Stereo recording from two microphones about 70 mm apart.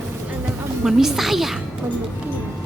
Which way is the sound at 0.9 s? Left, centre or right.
Centre.